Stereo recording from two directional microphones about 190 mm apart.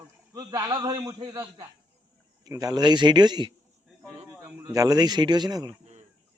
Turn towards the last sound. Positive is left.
turn(degrees=-20)  # may be behind; listen again after turning